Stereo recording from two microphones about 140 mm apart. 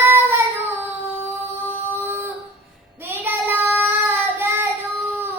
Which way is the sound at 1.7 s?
15° right (ahead or behind).